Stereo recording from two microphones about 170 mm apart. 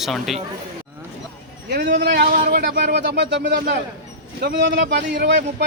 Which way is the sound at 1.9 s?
60° right (ahead or behind).